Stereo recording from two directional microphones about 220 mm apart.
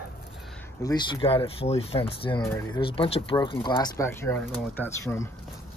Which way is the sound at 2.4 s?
10° left (ahead or behind).